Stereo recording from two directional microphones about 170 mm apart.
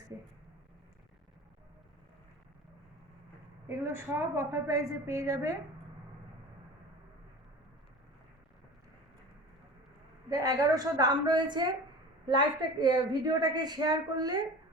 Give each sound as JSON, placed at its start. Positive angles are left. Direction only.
{"t": 3.7, "sound": "a woman's voice", "side_deg": -15}
{"t": 10.2, "sound": "a woman's voice", "side_deg": -20}
{"t": 12.8, "sound": "a woman's voice", "side_deg": -25}